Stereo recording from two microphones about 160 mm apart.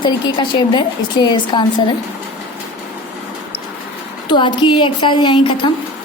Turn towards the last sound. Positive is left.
turn(degrees=30)  # may be behind; listen again after turning